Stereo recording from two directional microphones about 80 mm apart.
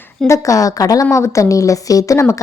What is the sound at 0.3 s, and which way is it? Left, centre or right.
A woman's voice, left.